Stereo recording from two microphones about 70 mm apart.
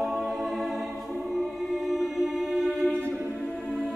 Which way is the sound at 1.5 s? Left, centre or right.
Centre.